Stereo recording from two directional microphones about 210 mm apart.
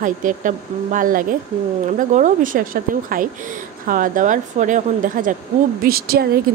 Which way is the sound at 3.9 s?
40° right (ahead or behind).